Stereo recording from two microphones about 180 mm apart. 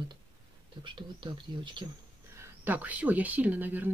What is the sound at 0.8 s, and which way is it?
Speech, 25° right (ahead or behind).